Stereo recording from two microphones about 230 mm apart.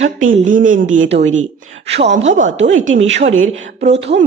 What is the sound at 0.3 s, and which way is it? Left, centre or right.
Speech, right.